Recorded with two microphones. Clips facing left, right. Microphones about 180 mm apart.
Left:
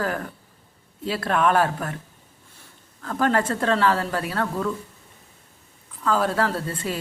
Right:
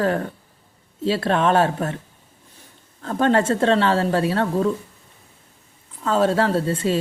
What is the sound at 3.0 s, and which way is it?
A woman's voice, 25° right (ahead or behind).